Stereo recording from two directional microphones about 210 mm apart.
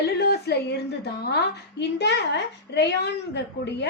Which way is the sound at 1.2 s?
50° left (ahead or behind).